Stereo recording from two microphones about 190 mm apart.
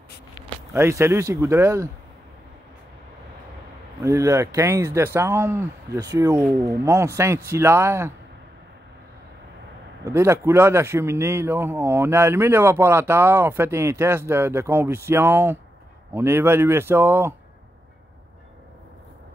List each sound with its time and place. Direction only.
0.7 s speech: 15° right (ahead or behind)
4.0 s speech: 15° right (ahead or behind)
10.0 s speech: 15° right (ahead or behind)